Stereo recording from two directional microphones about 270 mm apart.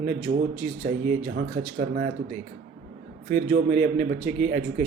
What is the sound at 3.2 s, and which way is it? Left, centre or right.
A man's voice, right.